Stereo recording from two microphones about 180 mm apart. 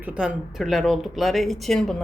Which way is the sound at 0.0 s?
5° right (ahead or behind).